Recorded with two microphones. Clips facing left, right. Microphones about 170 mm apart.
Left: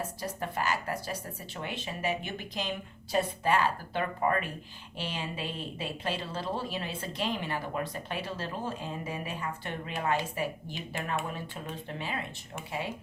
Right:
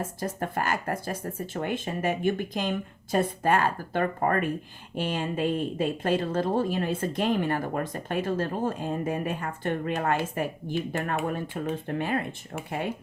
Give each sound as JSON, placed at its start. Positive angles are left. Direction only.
{"t": 0.0, "sound": "speech", "side_deg": -50}